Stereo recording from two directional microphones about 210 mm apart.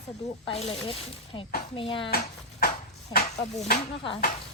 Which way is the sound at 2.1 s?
45° left (ahead or behind).